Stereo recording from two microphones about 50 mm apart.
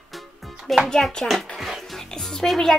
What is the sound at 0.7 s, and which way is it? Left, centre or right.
Speech, centre.